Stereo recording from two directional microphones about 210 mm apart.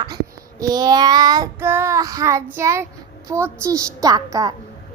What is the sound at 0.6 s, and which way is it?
A child's voice, 20° right (ahead or behind).